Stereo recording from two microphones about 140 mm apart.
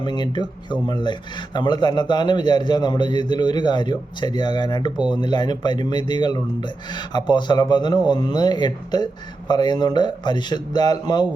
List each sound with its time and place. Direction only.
0.0 s a man's voice: 30° left (ahead or behind)